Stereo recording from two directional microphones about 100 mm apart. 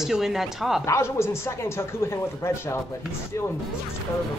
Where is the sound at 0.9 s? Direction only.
25° left (ahead or behind).